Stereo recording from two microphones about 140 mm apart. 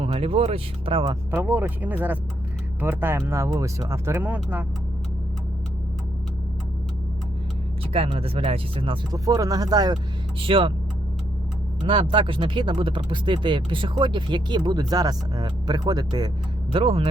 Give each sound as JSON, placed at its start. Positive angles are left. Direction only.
{"t": 0.0, "sound": "speech", "side_deg": -45}
{"t": 1.3, "sound": "speech", "side_deg": -15}
{"t": 7.9, "sound": "speech", "side_deg": -45}
{"t": 9.1, "sound": "speech", "side_deg": -25}
{"t": 11.8, "sound": "speech", "side_deg": -40}
{"t": 16.7, "sound": "speech", "side_deg": -40}